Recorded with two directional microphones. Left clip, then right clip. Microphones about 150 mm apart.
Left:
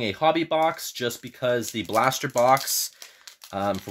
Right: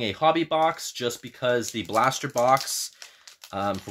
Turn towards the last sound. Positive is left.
turn(degrees=35)  # may be behind; listen again after turning